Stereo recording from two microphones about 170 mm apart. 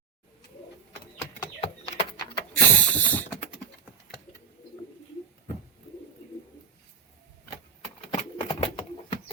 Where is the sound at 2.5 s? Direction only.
10° left (ahead or behind).